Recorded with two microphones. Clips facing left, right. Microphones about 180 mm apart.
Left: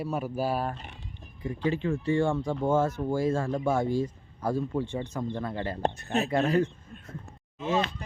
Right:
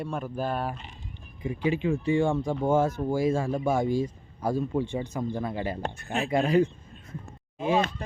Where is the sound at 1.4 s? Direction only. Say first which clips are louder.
Right 2 dB; 10° right (ahead or behind).